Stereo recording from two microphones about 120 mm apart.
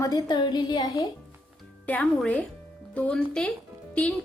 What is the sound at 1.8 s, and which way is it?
A woman's voice, 10° left (ahead or behind).